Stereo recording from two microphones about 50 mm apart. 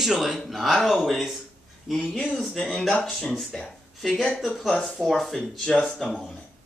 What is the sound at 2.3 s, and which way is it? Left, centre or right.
Speech, centre.